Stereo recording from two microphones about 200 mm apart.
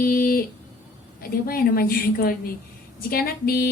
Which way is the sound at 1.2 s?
50° left (ahead or behind).